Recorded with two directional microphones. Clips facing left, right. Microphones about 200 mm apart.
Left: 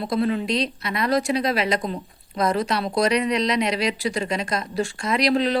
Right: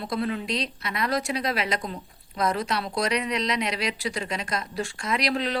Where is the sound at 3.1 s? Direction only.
5° right (ahead or behind).